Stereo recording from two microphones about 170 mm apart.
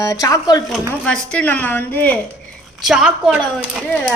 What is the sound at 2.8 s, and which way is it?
Speech, 5° right (ahead or behind).